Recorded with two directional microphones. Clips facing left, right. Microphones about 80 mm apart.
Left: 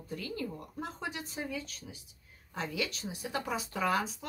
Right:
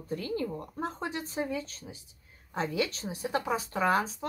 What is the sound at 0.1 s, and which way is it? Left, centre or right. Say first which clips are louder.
Speech: right 6 dB; right.